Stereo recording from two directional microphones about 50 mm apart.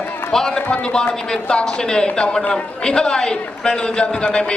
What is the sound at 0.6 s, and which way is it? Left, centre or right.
A man's voice, left.